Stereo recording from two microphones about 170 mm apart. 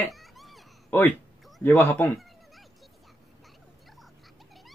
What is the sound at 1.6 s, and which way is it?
Speech, 10° left (ahead or behind).